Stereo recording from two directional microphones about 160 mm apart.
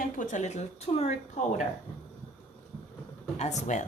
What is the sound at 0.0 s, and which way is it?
Speech, 55° left (ahead or behind).